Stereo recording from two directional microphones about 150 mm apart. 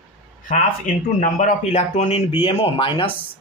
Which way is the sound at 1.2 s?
60° left (ahead or behind).